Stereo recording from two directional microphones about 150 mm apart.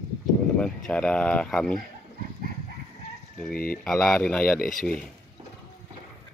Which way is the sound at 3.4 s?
5° left (ahead or behind).